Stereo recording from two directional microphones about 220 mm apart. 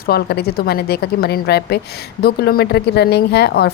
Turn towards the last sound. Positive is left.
turn(degrees=50)  # may be behind; listen again after turning